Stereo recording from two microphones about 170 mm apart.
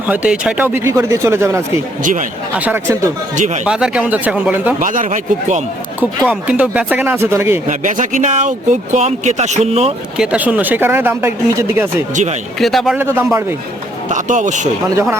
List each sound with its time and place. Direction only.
0.1 s speech: 5° right (ahead or behind)
4.8 s speech: 50° right (ahead or behind)
6.0 s speech: 5° right (ahead or behind)
7.7 s speech: 50° right (ahead or behind)
10.2 s speech: 10° right (ahead or behind)
12.1 s speech: 45° right (ahead or behind)
12.5 s speech: centre (ahead or behind)
14.1 s speech: 45° right (ahead or behind)